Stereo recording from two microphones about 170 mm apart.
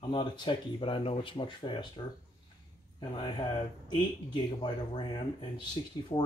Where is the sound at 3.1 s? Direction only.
25° left (ahead or behind).